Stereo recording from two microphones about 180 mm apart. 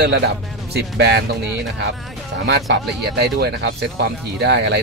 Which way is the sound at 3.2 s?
65° right (ahead or behind).